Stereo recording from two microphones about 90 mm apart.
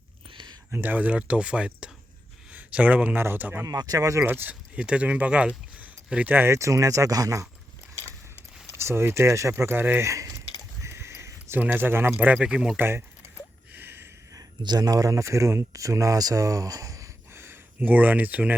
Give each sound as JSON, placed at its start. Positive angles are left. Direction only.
{"t": 0.7, "sound": "a man's voice", "side_deg": -20}
{"t": 3.7, "sound": "speech", "side_deg": -45}
{"t": 4.3, "sound": "speech", "side_deg": -20}
{"t": 7.9, "sound": "mechanisms", "side_deg": 20}
{"t": 8.7, "sound": "speech", "side_deg": -30}
{"t": 10.1, "sound": "keys jangling", "side_deg": -35}
{"t": 10.8, "sound": "a sound", "side_deg": -30}
{"t": 12.1, "sound": "speech", "side_deg": -15}
{"t": 12.7, "sound": "speech", "side_deg": -25}
{"t": 13.7, "sound": "a sound", "side_deg": -25}
{"t": 14.6, "sound": "speech", "side_deg": -50}